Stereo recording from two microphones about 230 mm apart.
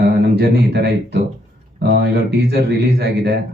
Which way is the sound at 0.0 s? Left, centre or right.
Right.